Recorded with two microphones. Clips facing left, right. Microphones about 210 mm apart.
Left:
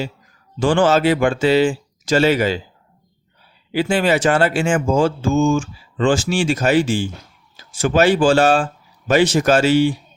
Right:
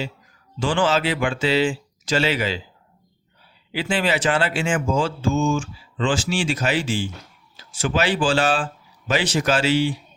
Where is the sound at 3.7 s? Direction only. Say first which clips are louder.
Left 6 dB; 45° left (ahead or behind).